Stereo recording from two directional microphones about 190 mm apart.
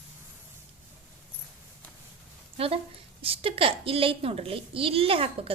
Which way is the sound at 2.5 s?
30° right (ahead or behind).